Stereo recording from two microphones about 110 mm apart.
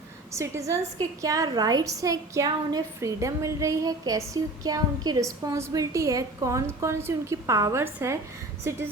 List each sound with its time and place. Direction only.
0.3 s a woman's voice: 25° right (ahead or behind)